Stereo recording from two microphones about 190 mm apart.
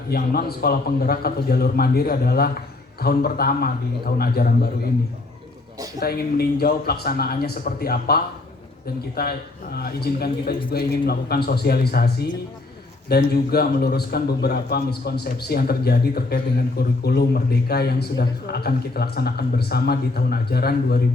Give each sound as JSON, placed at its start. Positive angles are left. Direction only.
{"t": 0.1, "sound": "a man's voice", "side_deg": 55}
{"t": 6.0, "sound": "a man's voice", "side_deg": 55}